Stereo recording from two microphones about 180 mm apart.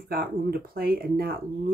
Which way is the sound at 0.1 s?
55° right (ahead or behind).